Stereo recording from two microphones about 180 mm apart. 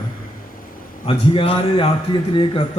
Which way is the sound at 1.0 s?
30° left (ahead or behind).